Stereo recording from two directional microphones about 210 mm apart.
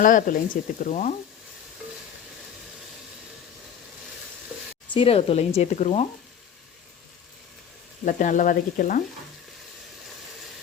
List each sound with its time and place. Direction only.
0.0 s speech: 40° left (ahead or behind)
4.9 s speech: 25° left (ahead or behind)
8.0 s speech: 40° left (ahead or behind)